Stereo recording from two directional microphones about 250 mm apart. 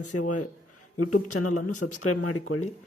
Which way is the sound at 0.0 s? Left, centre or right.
Left.